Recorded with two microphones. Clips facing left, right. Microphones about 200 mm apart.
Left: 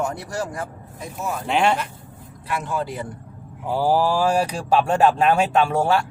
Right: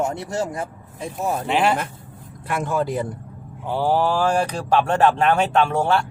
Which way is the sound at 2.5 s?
45° right (ahead or behind).